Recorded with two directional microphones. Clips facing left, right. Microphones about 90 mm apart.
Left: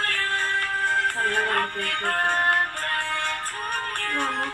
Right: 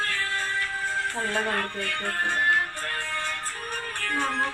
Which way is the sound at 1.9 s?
55° left (ahead or behind).